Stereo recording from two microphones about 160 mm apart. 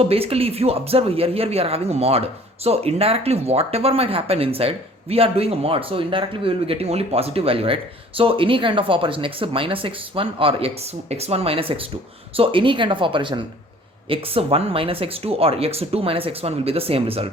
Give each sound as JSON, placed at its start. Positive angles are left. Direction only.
{"t": 0.0, "sound": "speech", "side_deg": -40}